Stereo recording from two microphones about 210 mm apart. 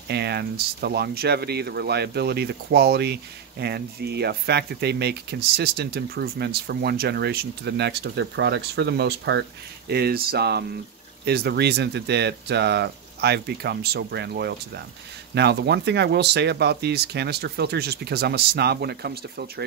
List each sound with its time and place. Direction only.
0.1 s speech: 50° right (ahead or behind)